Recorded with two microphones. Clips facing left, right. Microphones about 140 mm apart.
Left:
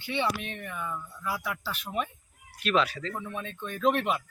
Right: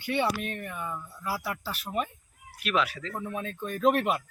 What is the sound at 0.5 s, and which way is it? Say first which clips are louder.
Speech: even; 5° right (ahead or behind).